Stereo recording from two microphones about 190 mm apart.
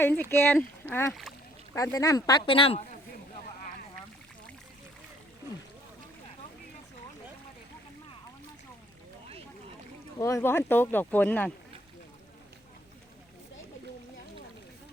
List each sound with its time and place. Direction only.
0.0 s speech: 10° left (ahead or behind); by 2.8 s 30° left (ahead or behind)
10.2 s speech: 15° left (ahead or behind)